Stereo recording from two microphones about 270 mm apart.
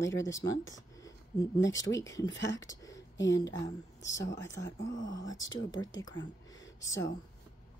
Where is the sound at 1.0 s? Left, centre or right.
Centre.